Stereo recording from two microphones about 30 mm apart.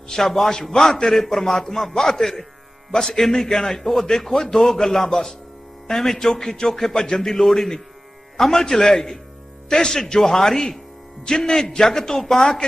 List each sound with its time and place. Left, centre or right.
0.1 s a man's voice: centre